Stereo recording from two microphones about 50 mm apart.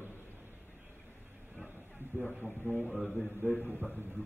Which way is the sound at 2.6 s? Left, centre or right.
Right.